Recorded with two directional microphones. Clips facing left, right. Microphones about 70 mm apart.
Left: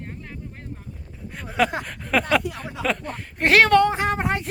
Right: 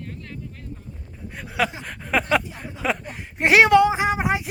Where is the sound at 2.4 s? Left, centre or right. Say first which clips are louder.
Left 5 dB; left.